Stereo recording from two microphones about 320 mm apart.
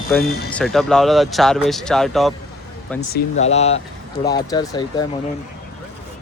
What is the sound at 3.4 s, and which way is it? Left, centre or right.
Speech, centre.